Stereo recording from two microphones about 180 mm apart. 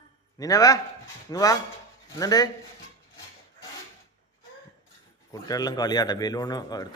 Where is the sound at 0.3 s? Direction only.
20° left (ahead or behind).